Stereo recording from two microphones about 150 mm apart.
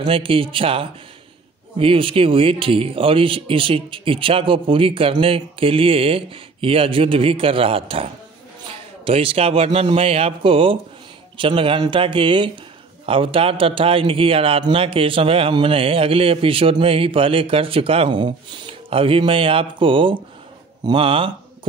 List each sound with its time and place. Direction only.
0.0 s a man's voice: 35° right (ahead or behind)